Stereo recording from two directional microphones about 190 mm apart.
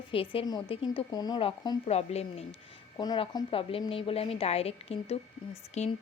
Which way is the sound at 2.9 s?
25° left (ahead or behind).